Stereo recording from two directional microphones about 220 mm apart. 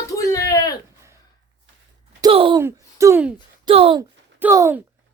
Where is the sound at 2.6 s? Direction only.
10° right (ahead or behind).